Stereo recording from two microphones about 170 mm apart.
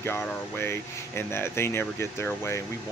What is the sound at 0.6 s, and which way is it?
Speech, 15° left (ahead or behind).